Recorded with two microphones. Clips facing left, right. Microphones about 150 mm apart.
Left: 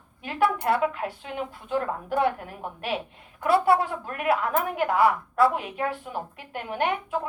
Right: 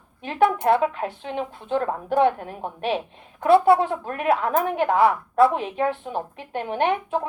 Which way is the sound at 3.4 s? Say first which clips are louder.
Right 5 dB; 25° right (ahead or behind).